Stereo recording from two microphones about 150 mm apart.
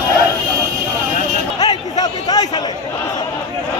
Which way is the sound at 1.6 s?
25° left (ahead or behind).